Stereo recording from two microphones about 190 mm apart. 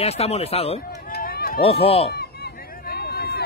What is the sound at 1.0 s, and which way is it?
Run, 50° left (ahead or behind).